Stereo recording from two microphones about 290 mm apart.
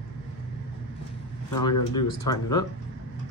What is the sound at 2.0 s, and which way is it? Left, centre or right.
Speech, centre.